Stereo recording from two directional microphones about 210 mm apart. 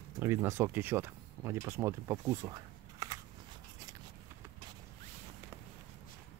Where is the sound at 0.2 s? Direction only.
10° right (ahead or behind).